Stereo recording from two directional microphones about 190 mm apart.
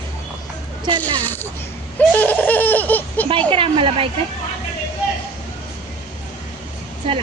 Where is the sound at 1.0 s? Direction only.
10° left (ahead or behind).